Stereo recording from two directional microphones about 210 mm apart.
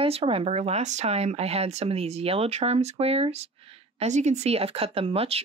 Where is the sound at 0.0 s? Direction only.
25° right (ahead or behind).